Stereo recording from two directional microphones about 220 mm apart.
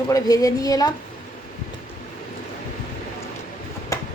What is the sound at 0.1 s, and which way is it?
Speech, 15° left (ahead or behind).